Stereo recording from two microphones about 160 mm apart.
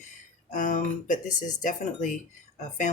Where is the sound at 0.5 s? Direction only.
50° left (ahead or behind).